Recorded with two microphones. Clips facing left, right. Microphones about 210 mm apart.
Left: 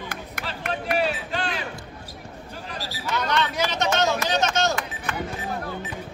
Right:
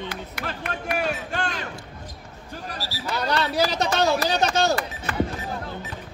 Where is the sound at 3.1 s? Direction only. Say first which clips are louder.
Even; 35° right (ahead or behind).